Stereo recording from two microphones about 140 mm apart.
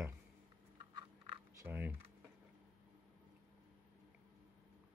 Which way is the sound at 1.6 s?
15° right (ahead or behind).